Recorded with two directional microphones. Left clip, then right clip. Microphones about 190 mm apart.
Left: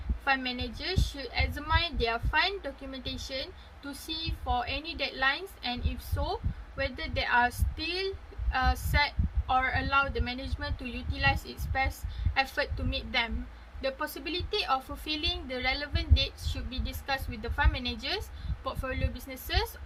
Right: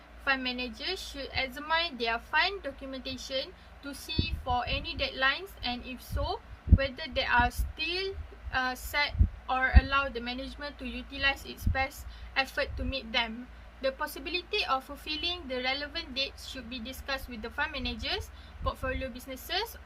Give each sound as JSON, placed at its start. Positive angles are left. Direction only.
{"t": 0.3, "sound": "a woman's voice", "side_deg": -5}